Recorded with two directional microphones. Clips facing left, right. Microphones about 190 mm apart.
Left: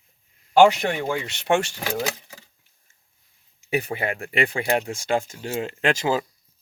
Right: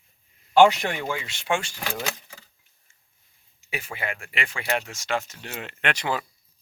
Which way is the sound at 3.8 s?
40° left (ahead or behind).